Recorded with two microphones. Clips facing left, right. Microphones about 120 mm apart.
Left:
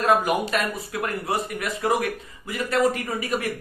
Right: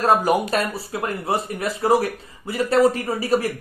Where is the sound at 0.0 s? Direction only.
35° right (ahead or behind).